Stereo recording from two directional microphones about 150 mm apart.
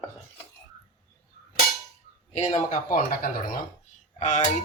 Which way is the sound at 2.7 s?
70° left (ahead or behind).